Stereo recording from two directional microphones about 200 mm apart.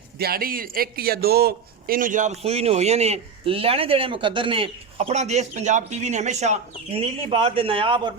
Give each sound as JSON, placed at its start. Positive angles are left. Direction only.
{"t": 0.2, "sound": "a man's voice", "side_deg": -50}